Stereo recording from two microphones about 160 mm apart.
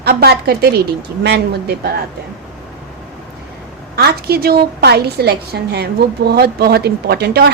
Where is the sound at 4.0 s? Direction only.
80° right.